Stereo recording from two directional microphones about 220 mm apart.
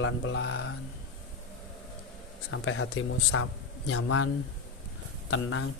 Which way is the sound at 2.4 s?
65° left (ahead or behind).